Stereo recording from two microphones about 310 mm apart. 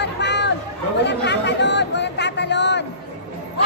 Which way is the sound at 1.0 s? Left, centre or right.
Left.